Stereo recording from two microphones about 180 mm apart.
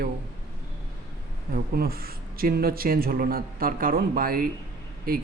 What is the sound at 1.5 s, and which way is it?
Speech, 55° right (ahead or behind).